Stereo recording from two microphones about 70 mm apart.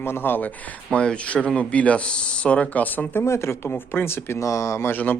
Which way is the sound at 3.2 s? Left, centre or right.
Left.